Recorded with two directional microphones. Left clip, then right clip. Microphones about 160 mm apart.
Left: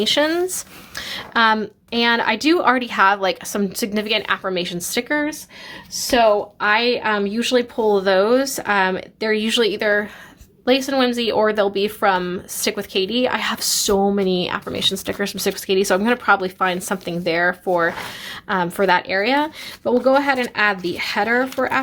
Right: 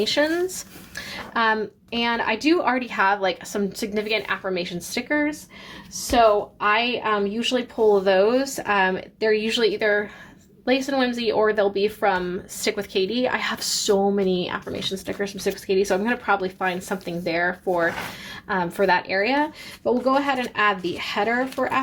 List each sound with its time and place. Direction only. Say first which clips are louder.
0.0 s speech: left 4 dB; 30° left (ahead or behind)